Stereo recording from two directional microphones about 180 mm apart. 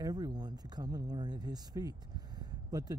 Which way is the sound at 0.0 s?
20° right (ahead or behind).